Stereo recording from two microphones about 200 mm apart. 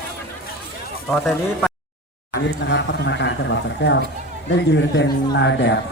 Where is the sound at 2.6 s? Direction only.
60° left (ahead or behind).